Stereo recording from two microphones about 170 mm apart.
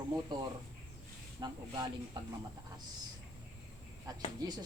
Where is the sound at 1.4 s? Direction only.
25° right (ahead or behind).